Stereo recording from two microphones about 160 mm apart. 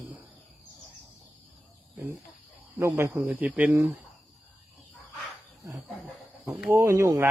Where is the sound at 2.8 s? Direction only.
10° right (ahead or behind).